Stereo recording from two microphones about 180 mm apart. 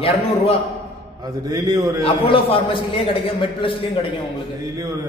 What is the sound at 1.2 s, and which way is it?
Speech, 20° right (ahead or behind).